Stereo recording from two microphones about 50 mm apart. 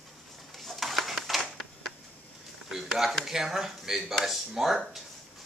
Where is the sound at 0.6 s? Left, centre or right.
Centre.